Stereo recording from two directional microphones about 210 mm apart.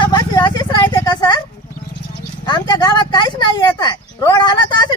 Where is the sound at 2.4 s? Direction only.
20° left (ahead or behind).